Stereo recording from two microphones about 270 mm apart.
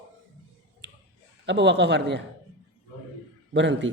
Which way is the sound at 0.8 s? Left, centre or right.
Right.